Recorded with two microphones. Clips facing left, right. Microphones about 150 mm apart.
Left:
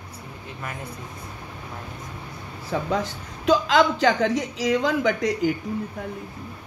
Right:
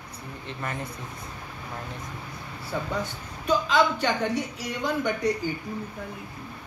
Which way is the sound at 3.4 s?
90° left.